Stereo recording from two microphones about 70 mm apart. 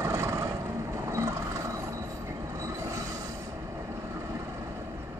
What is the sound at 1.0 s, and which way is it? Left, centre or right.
Vehicle, right.